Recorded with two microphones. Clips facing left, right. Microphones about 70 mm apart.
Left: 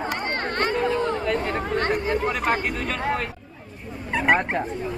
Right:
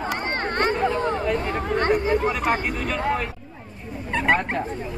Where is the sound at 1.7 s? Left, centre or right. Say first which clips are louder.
Right 4 dB; right.